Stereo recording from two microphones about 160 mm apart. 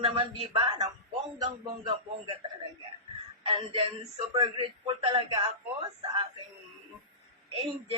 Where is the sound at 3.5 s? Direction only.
35° right (ahead or behind).